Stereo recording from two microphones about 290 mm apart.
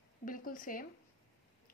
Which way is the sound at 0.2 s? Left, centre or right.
Left.